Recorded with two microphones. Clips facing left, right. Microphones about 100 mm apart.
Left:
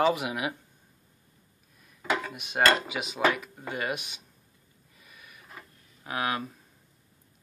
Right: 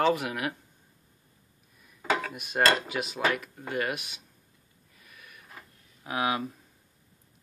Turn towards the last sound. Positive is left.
turn(degrees=-5)  # may be behind; listen again after turning